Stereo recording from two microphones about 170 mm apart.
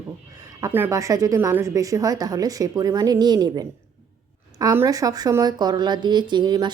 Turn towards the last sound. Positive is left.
turn(degrees=-25)  # may be behind; listen again after turning